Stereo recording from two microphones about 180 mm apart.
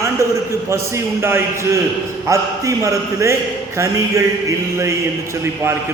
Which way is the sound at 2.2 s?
15° right (ahead or behind).